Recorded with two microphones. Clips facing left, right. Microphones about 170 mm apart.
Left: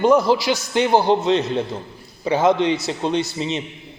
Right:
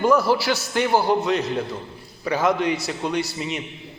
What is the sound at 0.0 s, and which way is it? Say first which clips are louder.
A man's voice: left 3 dB; 20° left (ahead or behind).